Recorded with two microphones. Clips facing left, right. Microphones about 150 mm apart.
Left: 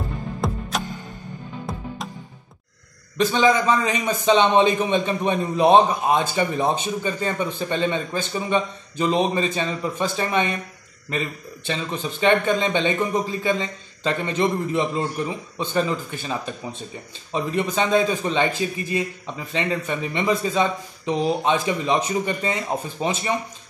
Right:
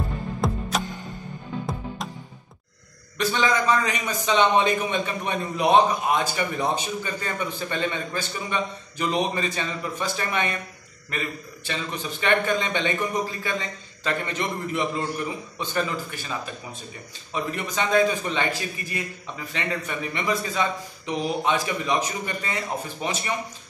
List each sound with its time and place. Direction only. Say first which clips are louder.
0.4 s music: even; centre (ahead or behind)
3.2 s a man's voice: left 5 dB; 20° left (ahead or behind)